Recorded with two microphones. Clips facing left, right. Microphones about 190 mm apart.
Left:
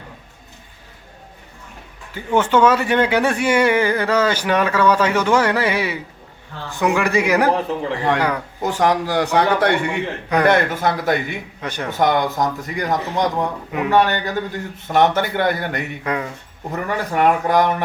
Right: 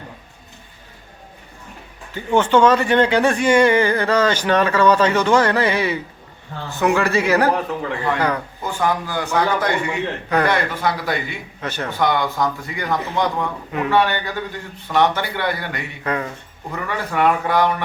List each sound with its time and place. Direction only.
2.1 s speech: 10° left (ahead or behind)
7.5 s speech: 30° left (ahead or behind)
8.6 s a man's voice: 85° left; by 10.0 s 60° left (ahead or behind)
10.4 s a man's voice: 50° left (ahead or behind)
11.6 s speech: 15° left (ahead or behind)
11.9 s a man's voice: 45° left (ahead or behind)
16.0 s speech: 10° left (ahead or behind)
16.7 s speech: 40° left (ahead or behind)